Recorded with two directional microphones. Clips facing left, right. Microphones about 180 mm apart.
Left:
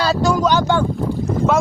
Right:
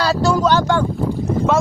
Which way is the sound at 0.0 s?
15° left (ahead or behind).